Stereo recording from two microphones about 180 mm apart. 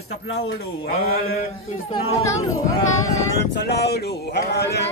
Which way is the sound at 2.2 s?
15° left (ahead or behind).